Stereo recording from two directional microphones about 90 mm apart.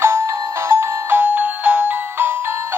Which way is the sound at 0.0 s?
30° right (ahead or behind).